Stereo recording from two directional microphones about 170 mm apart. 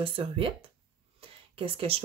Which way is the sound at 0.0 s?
30° right (ahead or behind).